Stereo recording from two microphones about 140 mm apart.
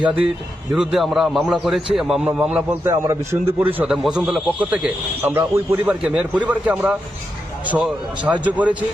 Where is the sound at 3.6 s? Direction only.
10° right (ahead or behind).